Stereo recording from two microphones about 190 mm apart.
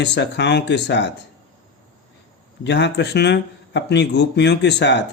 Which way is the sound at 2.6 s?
65° left (ahead or behind).